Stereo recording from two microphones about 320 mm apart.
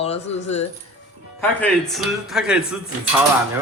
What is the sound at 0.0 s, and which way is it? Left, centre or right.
Speech, centre.